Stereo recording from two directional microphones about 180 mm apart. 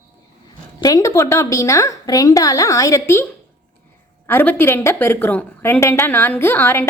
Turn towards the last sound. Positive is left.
turn(degrees=10)  # may be behind; listen again after turning